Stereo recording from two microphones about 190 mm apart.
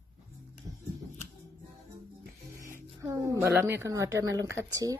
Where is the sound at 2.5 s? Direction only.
15° right (ahead or behind).